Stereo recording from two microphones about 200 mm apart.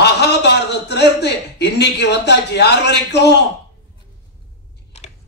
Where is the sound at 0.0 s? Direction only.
60° left (ahead or behind).